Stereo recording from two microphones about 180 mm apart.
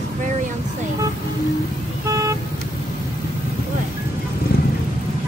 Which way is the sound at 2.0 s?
20° right (ahead or behind).